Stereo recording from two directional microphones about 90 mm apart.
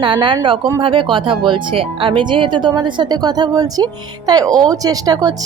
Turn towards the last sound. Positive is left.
turn(degrees=-45)  # may be behind; listen again after turning